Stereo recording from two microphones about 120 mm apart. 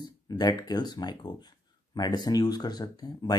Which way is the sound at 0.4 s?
35° left (ahead or behind).